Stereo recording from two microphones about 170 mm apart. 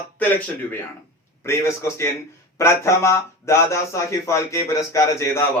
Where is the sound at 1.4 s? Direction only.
15° left (ahead or behind).